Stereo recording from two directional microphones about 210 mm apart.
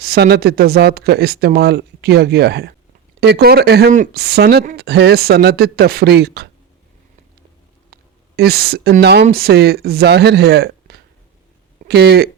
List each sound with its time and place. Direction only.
0.0 s speech: 50° right (ahead or behind)
8.4 s speech: 50° right (ahead or behind)